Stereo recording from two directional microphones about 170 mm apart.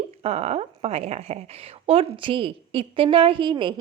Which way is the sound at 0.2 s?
40° right (ahead or behind).